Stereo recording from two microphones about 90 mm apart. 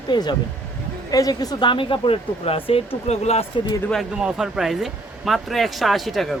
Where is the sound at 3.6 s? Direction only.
75° left (ahead or behind).